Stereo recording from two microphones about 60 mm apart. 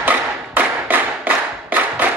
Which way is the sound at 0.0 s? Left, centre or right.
Right.